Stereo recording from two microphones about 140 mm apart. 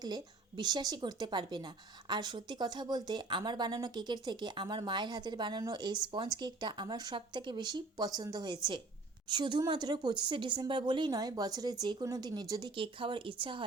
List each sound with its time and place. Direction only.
0.0 s a woman's voice: 30° right (ahead or behind)